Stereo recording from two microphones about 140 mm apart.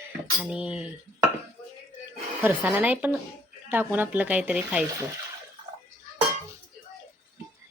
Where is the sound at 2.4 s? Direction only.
10° right (ahead or behind).